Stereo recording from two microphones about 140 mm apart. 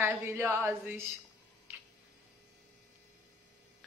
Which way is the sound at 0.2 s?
15° right (ahead or behind).